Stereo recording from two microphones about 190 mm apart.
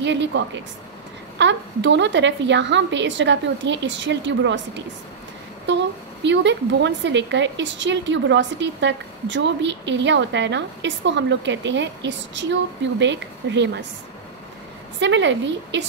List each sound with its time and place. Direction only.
0.0 s a woman's voice: 70° right (ahead or behind)
1.4 s a woman's voice: 70° right (ahead or behind)
5.7 s a woman's voice: 70° right (ahead or behind)
15.0 s a woman's voice: 70° right (ahead or behind)